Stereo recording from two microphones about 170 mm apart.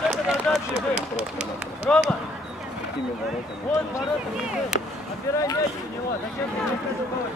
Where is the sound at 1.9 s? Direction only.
10° left (ahead or behind).